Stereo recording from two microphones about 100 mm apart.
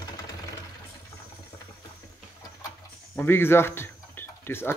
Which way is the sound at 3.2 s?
25° left (ahead or behind).